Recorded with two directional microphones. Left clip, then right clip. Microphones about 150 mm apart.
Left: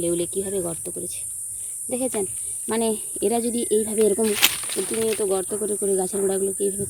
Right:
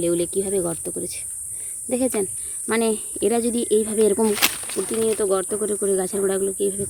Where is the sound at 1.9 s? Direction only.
20° right (ahead or behind).